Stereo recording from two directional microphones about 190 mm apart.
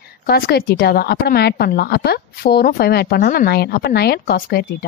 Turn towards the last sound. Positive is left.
turn(degrees=50)  # may be behind; listen again after turning